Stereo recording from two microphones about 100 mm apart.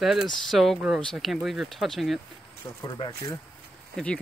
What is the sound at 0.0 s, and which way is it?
Speech, 5° right (ahead or behind).